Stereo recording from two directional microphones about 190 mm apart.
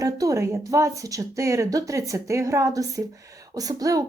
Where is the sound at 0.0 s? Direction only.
20° right (ahead or behind).